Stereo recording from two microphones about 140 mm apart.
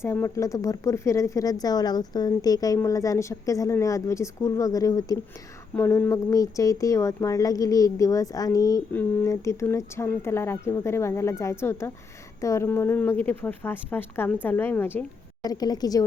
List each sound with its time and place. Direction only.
0.0 s speech: 20° left (ahead or behind)
5.7 s a woman's voice: 15° left (ahead or behind)
15.4 s speech: 30° left (ahead or behind)